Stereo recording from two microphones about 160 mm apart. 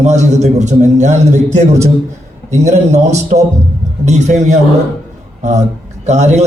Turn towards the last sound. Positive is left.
turn(degrees=-45)  # may be behind; listen again after turning